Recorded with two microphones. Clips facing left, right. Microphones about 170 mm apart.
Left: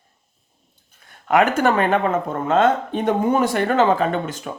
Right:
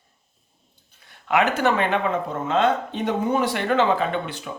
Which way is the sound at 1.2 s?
45° left (ahead or behind).